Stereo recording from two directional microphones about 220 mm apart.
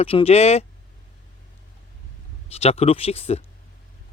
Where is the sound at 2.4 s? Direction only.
30° left (ahead or behind).